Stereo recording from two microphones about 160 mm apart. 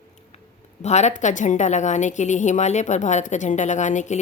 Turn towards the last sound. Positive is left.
turn(degrees=50)  # may be behind; listen again after turning